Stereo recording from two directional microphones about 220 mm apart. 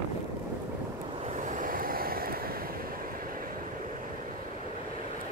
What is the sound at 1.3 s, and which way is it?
Vehicle, 35° right (ahead or behind).